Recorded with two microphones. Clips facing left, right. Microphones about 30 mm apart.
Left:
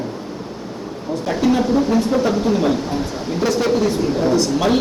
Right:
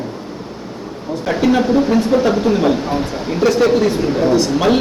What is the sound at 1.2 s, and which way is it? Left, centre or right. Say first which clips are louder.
Speech: right 3 dB; right.